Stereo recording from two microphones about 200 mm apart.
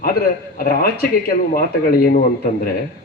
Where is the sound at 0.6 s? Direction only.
45° left (ahead or behind).